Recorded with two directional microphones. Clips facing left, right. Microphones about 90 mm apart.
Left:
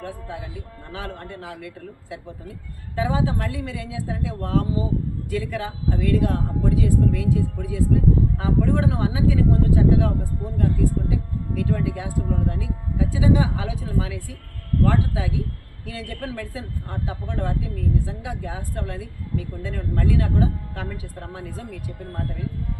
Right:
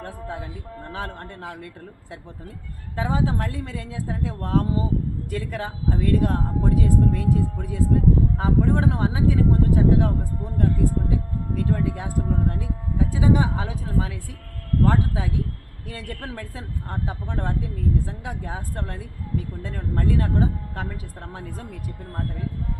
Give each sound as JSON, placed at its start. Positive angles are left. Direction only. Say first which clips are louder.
{"t": 0.0, "sound": "a woman's voice", "louder": "even", "side_deg": -40}
{"t": 11.6, "sound": "a woman's voice", "louder": "even", "side_deg": -35}